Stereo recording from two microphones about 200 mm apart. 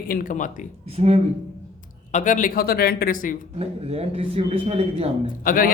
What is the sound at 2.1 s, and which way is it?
Speech, 40° left (ahead or behind).